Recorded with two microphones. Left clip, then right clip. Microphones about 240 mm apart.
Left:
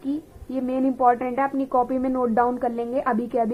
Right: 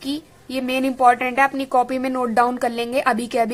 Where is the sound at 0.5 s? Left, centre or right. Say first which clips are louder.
Right 2 dB; right.